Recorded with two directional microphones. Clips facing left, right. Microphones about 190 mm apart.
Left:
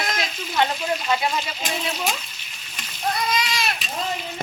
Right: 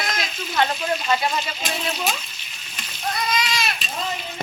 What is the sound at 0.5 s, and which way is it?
A woman's voice, 10° left (ahead or behind).